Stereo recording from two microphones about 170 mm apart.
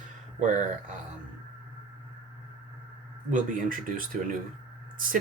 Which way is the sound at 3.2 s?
50° right (ahead or behind).